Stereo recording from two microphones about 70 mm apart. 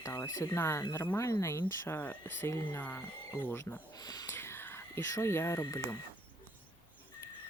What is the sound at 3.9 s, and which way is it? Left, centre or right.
Speech, left.